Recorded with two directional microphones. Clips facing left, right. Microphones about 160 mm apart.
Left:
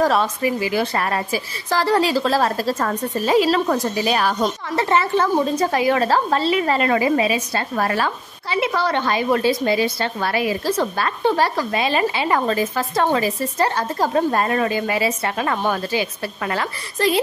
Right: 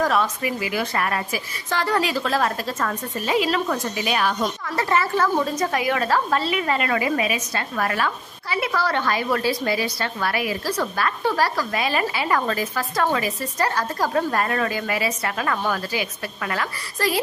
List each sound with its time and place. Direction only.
0.0 s a woman's voice: 30° left (ahead or behind)
4.7 s a woman's voice: 25° left (ahead or behind)